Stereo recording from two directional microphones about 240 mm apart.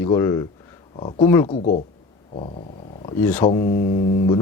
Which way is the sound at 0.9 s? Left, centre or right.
Left.